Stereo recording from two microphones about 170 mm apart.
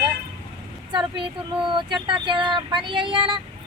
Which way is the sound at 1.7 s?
30° right (ahead or behind).